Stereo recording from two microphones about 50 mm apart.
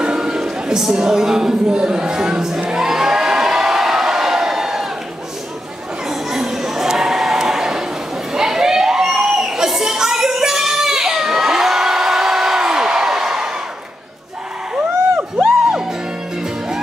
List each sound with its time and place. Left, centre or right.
0.0 s speech: centre
2.6 s a sound: centre
6.0 s crowd: centre